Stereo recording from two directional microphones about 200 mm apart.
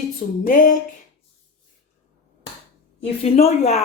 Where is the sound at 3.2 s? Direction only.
30° left (ahead or behind).